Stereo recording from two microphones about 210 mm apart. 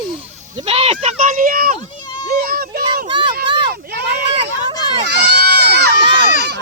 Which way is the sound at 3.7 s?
50° right (ahead or behind).